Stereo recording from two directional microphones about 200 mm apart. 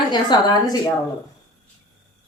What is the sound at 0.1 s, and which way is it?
Speech, 20° left (ahead or behind).